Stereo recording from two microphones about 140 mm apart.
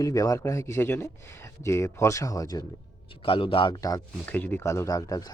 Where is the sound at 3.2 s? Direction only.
40° left (ahead or behind).